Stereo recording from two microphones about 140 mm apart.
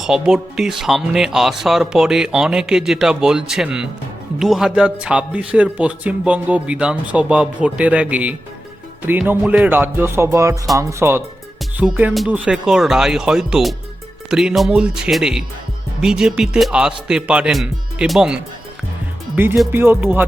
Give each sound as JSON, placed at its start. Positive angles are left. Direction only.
{"t": 0.0, "sound": "speech", "side_deg": -5}
{"t": 19.7, "sound": "speech", "side_deg": -15}